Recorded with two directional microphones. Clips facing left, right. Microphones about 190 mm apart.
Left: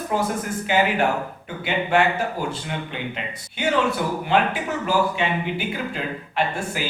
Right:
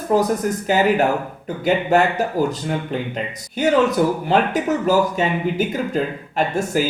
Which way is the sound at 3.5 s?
40° right (ahead or behind).